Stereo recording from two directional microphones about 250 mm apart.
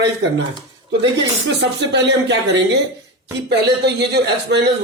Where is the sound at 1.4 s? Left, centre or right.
Right.